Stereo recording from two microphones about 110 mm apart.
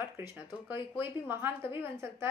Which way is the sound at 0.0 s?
20° right (ahead or behind).